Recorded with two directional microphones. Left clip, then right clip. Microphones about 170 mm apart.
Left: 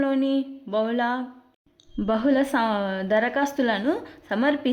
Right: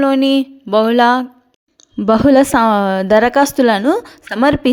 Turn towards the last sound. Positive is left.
turn(degrees=-40)  # may be behind; listen again after turning